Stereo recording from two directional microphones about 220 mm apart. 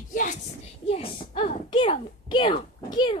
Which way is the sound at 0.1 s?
35° left (ahead or behind).